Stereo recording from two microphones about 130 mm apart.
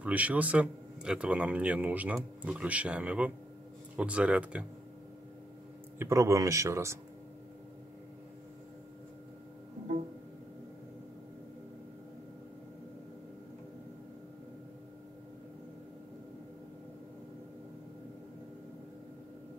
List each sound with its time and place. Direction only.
0.0 s speech: 10° right (ahead or behind)
5.9 s speech: 20° right (ahead or behind)